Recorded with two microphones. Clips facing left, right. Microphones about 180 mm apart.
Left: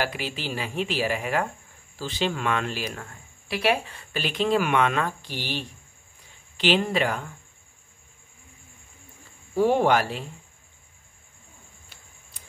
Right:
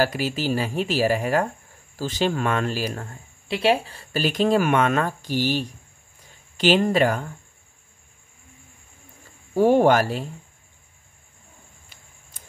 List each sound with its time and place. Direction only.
0.0 s speech: 40° right (ahead or behind)
9.6 s speech: 45° right (ahead or behind)